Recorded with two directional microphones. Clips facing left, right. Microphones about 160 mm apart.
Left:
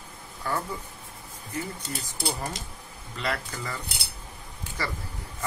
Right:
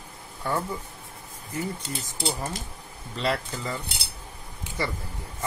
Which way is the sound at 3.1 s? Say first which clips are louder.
Right 4 dB; 30° right (ahead or behind).